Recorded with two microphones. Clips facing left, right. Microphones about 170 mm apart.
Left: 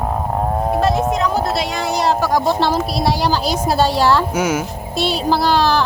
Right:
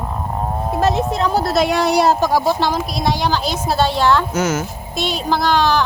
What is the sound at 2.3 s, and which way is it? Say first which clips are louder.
Speech: left 1 dB; centre (ahead or behind).